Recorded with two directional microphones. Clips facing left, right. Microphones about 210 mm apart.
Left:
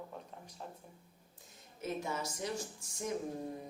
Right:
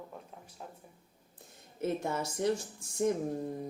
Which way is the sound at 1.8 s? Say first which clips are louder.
Right 5 dB; 60° right (ahead or behind).